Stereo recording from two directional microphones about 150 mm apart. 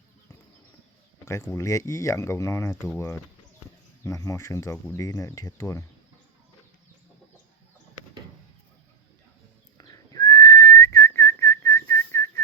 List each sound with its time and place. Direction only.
1.2 s speech: 20° left (ahead or behind)
4.0 s speech: 20° left (ahead or behind)
9.7 s whistling: 25° left (ahead or behind)